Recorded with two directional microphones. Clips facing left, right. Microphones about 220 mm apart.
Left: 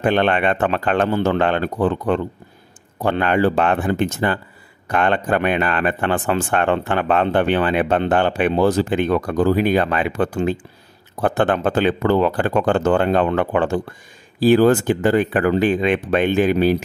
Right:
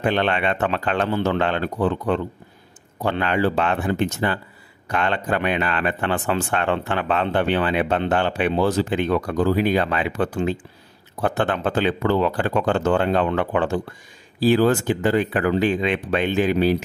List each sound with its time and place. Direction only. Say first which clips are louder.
0.0 s speech: left 4 dB; 50° left (ahead or behind)